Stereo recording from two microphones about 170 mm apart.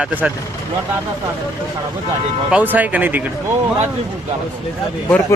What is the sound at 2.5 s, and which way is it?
Speech, 10° right (ahead or behind).